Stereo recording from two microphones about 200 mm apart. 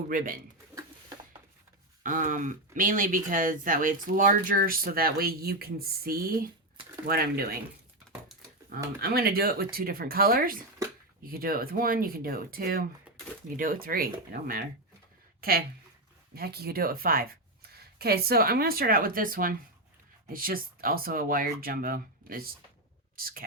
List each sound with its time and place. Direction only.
0.1 s speech: 45° right (ahead or behind)
2.0 s speech: 40° right (ahead or behind)
9.0 s speech: 50° right (ahead or behind)